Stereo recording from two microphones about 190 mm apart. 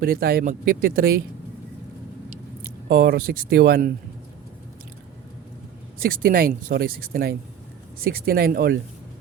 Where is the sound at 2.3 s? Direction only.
50° right (ahead or behind).